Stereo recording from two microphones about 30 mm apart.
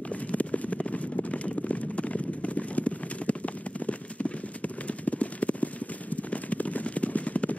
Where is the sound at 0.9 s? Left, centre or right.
Left.